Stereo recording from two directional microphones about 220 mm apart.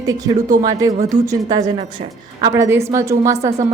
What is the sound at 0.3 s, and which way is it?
A woman's voice, 15° right (ahead or behind).